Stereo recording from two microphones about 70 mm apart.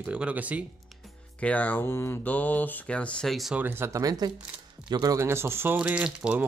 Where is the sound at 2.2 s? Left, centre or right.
Left.